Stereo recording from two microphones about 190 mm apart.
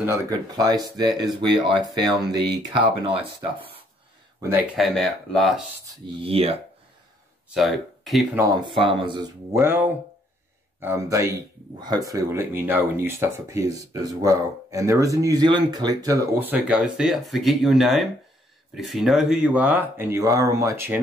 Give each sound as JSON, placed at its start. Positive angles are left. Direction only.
{"t": 0.3, "sound": "speech", "side_deg": -20}
{"t": 4.4, "sound": "speech", "side_deg": -15}
{"t": 4.7, "sound": "speech", "side_deg": 0}
{"t": 5.9, "sound": "speech", "side_deg": -30}
{"t": 7.4, "sound": "speech", "side_deg": 0}
{"t": 8.4, "sound": "speech", "side_deg": -20}